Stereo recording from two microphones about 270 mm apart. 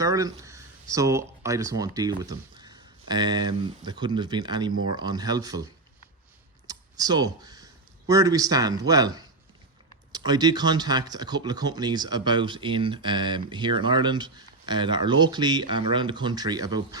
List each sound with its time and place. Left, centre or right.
0.0 s speech: centre
6.7 s speech: centre